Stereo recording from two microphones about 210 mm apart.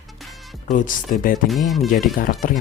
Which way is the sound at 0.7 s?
40° left (ahead or behind).